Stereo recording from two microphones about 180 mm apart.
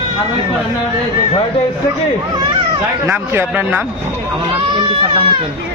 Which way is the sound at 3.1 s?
10° right (ahead or behind).